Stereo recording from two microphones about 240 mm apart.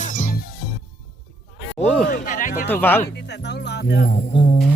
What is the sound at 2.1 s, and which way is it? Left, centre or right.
Speech, left.